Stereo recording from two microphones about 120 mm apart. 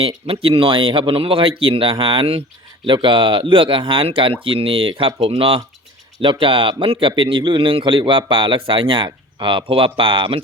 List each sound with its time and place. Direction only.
0.3 s a man's voice: 50° right (ahead or behind)